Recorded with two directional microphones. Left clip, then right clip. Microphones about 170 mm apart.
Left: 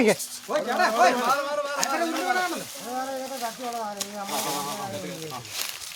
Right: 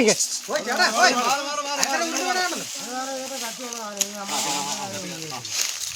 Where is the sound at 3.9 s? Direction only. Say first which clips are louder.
Right 3 dB; 10° left (ahead or behind).